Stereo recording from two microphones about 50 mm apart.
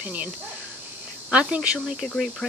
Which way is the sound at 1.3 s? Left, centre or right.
Right.